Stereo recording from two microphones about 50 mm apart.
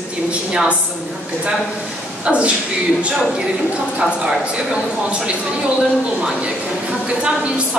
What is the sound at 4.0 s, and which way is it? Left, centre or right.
Speech, centre.